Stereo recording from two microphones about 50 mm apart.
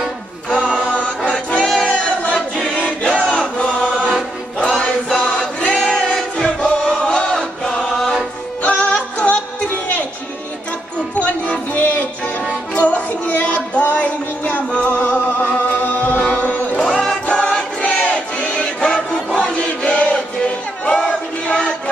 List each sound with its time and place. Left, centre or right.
0.5 s chant: centre
0.8 s choir: left
3.3 s chant: left
4.6 s choir: centre
5.8 s choir: centre
6.4 s music: left; by 8.3 s centre
8.6 s music: left
11.1 s music: left
12.7 s child singing: left
13.7 s music: left
16.8 s music: centre